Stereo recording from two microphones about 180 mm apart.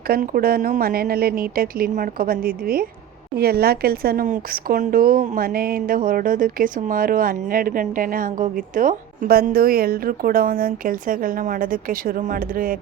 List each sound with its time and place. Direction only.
0.1 s a woman's voice: 55° right (ahead or behind)